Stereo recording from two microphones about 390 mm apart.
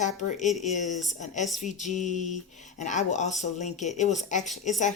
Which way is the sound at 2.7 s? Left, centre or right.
Centre.